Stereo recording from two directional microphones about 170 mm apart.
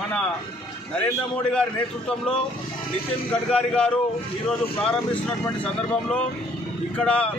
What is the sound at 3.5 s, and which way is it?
A man's voice, 5° left (ahead or behind).